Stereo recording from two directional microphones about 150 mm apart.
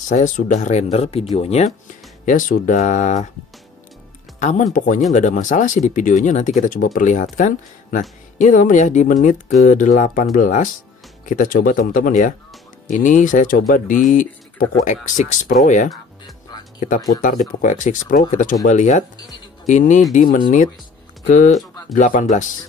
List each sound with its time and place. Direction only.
0.1 s speech: 55° left (ahead or behind)
2.2 s speech: 65° left (ahead or behind)
4.4 s speech: 55° left (ahead or behind)
17.2 s speech: 60° left (ahead or behind)